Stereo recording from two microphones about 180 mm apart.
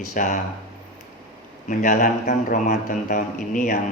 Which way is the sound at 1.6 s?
45° left (ahead or behind).